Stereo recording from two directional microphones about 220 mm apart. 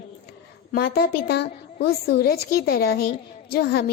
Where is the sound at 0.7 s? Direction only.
45° left (ahead or behind).